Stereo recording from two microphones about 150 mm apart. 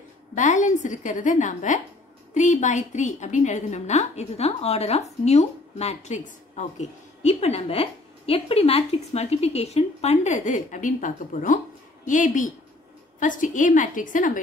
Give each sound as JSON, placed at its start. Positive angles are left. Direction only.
{"t": 0.3, "sound": "a woman's voice", "side_deg": 55}